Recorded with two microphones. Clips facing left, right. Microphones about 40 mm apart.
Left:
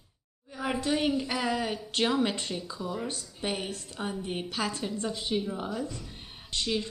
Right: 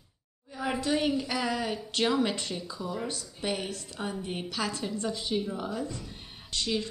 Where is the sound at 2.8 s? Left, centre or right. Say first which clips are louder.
Even; centre.